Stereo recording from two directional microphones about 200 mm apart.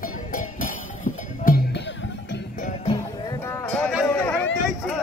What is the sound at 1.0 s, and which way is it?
Music, 45° left (ahead or behind).